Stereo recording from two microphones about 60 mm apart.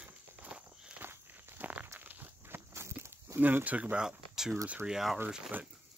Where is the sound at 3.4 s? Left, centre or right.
Right.